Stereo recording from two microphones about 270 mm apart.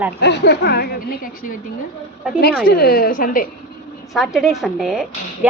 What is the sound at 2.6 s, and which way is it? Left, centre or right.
Speech, left.